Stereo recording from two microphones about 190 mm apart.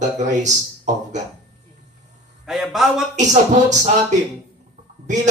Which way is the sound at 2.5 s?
Centre (ahead or behind).